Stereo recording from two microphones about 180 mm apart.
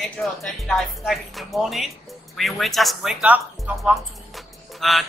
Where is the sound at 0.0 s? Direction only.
Centre (ahead or behind).